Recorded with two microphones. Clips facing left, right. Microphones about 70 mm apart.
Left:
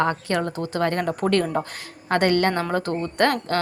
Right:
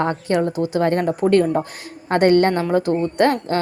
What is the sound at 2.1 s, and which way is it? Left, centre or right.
Speech, right.